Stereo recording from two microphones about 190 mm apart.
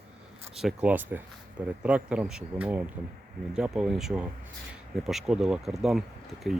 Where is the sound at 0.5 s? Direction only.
5° right (ahead or behind).